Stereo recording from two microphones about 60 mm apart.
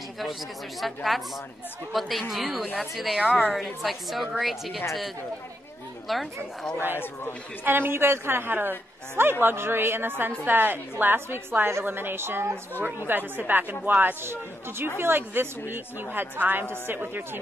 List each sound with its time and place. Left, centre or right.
0.2 s a woman's voice: centre
6.0 s a woman's voice: centre
7.6 s speech: right
12.8 s speech: right